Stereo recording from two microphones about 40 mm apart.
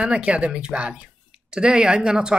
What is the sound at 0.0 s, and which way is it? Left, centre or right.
Speech, right.